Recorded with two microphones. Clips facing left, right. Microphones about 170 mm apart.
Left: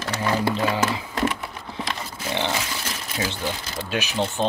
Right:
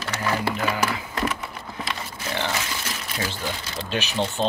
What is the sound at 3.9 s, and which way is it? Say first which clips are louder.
Speech: left 1 dB; 10° left (ahead or behind).